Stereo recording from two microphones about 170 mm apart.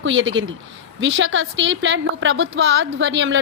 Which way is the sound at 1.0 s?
90° right.